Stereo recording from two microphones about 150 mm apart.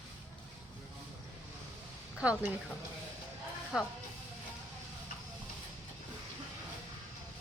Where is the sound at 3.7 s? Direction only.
5° right (ahead or behind).